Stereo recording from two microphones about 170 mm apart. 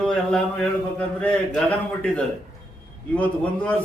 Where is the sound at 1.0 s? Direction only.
5° left (ahead or behind).